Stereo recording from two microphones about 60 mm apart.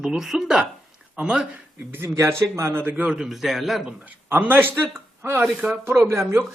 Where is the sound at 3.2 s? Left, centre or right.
Centre.